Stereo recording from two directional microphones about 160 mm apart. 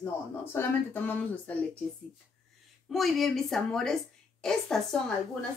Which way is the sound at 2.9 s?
Centre (ahead or behind).